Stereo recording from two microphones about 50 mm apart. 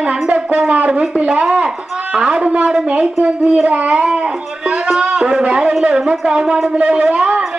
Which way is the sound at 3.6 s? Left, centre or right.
Right.